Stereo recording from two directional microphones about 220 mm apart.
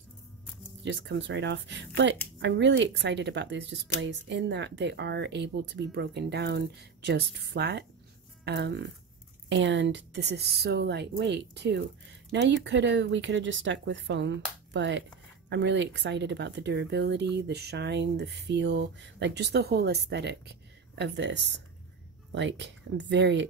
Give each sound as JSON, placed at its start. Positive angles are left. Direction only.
{"t": 0.8, "sound": "speech", "side_deg": -55}